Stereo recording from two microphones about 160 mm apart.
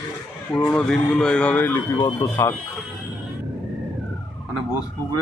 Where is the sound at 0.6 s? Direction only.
15° left (ahead or behind).